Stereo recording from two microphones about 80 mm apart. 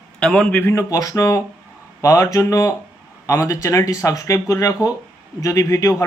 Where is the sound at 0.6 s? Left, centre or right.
Left.